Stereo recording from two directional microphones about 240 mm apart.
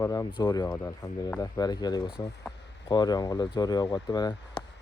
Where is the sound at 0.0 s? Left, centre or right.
Centre.